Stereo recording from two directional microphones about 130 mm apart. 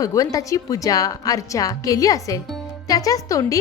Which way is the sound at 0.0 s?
25° left (ahead or behind).